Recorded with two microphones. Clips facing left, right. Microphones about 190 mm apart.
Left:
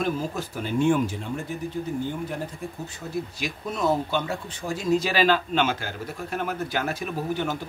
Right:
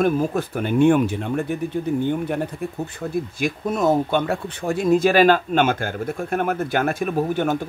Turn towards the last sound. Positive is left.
turn(degrees=-50)  # may be behind; listen again after turning